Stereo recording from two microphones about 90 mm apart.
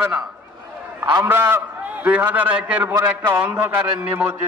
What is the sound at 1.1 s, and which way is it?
A man's voice, 30° right (ahead or behind).